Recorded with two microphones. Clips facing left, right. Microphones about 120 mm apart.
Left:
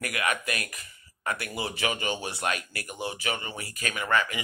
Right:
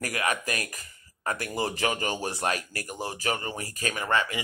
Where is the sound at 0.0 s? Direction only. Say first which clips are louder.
Right 1 dB; 35° right (ahead or behind).